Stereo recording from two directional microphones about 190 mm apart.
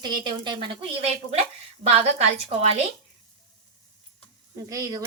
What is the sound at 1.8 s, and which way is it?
Speech, 35° right (ahead or behind).